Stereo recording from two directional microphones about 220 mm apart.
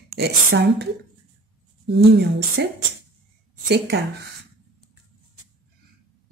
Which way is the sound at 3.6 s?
50° right (ahead or behind).